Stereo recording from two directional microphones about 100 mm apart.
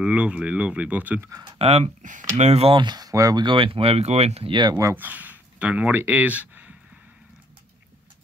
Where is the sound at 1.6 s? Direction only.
90° right.